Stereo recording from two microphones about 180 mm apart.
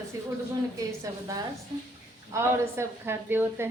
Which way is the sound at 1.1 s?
15° right (ahead or behind).